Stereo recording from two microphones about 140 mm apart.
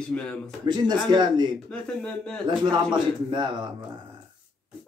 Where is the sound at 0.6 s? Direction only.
30° right (ahead or behind).